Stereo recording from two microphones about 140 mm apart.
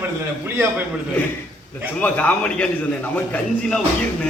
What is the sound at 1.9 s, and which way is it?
A man's voice, 10° left (ahead or behind).